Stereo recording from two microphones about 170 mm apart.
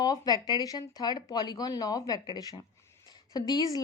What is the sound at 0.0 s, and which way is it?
A woman's voice, 20° left (ahead or behind).